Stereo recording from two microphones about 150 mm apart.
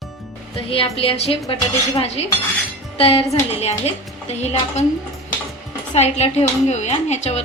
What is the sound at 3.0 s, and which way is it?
A woman's voice, 40° left (ahead or behind).